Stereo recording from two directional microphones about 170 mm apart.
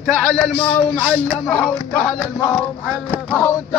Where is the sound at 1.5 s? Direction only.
10° left (ahead or behind).